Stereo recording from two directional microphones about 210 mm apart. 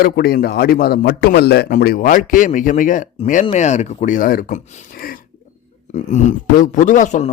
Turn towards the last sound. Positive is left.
turn(degrees=35)  # may be behind; listen again after turning